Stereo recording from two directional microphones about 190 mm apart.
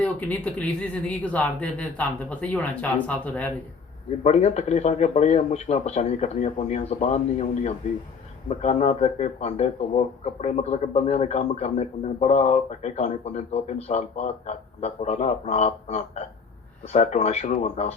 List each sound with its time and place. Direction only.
0.0 s speech: 10° left (ahead or behind)
4.2 s speech: 35° left (ahead or behind)